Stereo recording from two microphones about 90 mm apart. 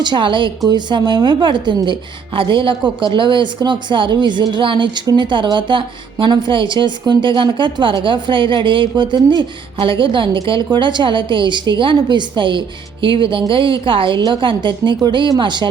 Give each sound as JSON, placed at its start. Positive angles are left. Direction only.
{"t": 0.0, "sound": "a woman's voice", "side_deg": -65}
{"t": 0.6, "sound": "a woman's voice", "side_deg": -55}
{"t": 9.8, "sound": "a woman's voice", "side_deg": -70}
{"t": 14.2, "sound": "a woman's voice", "side_deg": -60}